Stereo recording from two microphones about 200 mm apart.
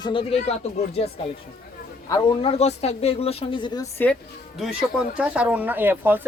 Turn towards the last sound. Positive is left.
turn(degrees=-10)  # may be behind; listen again after turning